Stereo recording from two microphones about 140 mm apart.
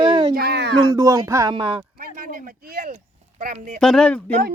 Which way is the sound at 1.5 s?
35° right (ahead or behind).